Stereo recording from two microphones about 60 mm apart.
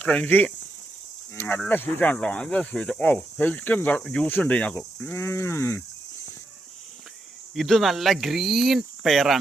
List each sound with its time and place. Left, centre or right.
0.0 s speech: left
2.1 s speech: centre
5.1 s speech: left
7.5 s speech: centre